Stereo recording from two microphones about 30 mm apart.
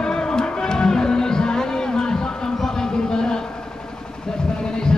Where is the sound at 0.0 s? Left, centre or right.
Left.